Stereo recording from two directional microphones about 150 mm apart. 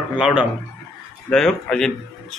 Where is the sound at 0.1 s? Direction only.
5° right (ahead or behind).